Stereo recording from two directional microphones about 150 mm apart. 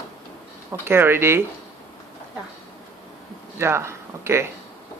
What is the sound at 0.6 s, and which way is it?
Speech, 15° right (ahead or behind).